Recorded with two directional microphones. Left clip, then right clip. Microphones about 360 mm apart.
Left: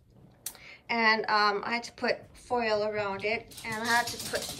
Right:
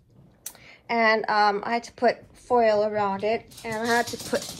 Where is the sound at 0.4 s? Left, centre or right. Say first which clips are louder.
Right 1 dB; right.